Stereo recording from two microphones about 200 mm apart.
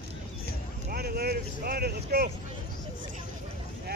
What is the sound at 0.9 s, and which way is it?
Vehicle, 50° right (ahead or behind).